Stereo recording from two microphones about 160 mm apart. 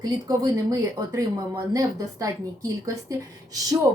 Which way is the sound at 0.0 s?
20° right (ahead or behind).